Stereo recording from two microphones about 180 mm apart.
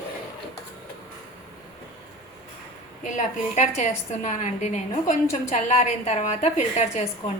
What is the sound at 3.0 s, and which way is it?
A woman's voice, 45° left (ahead or behind).